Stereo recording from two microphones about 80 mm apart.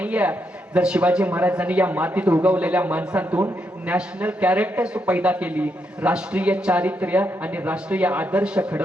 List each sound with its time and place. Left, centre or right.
0.0 s speech: centre